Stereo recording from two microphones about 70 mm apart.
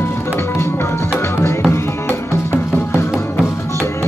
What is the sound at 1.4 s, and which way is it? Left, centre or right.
Music, left.